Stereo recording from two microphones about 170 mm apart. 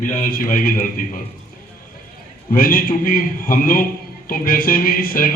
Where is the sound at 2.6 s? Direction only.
55° left (ahead or behind).